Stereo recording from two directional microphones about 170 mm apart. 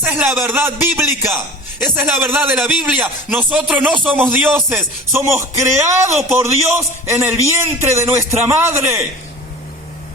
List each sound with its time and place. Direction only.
0.0 s a man's voice: 10° right (ahead or behind)
4.7 s a man's voice: 15° right (ahead or behind)